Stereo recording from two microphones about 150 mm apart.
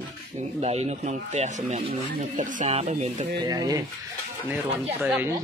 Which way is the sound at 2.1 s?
60° right (ahead or behind).